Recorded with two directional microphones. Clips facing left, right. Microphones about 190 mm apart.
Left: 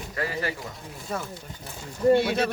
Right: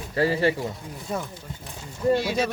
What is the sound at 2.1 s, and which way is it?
Speech, 60° left (ahead or behind).